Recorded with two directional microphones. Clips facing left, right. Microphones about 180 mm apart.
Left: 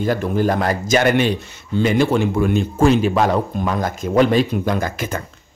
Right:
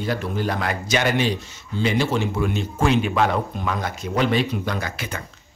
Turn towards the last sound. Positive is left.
turn(degrees=45)  # may be behind; listen again after turning